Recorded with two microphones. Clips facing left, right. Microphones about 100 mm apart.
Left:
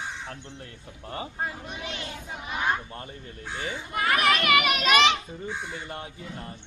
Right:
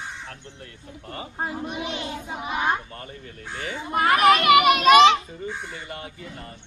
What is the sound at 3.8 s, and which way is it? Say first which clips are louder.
A child's voice: right 7 dB; 40° right (ahead or behind).